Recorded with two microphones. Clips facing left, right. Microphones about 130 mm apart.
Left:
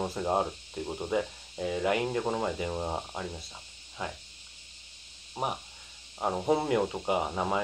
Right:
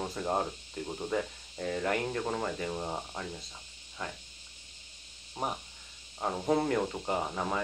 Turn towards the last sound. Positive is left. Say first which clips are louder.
# left 3 dB
turn(degrees=15)  # may be behind; listen again after turning